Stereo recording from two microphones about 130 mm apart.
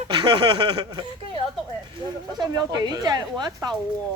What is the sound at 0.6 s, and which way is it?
Speech, 30° right (ahead or behind).